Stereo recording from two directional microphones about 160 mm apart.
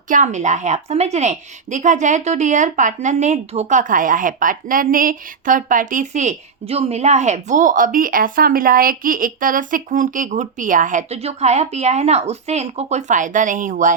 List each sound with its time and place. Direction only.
0.1 s a woman's voice: 50° right (ahead or behind)